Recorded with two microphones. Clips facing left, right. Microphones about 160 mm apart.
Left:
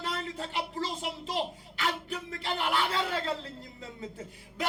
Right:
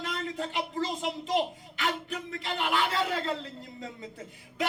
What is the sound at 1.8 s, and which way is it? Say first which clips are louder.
Speech: right 1 dB; 35° left (ahead or behind).